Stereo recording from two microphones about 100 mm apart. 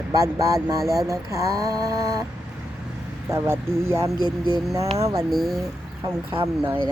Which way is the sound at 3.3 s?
25° right (ahead or behind).